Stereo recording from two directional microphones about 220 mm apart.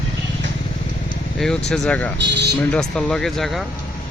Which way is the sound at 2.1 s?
50° right (ahead or behind).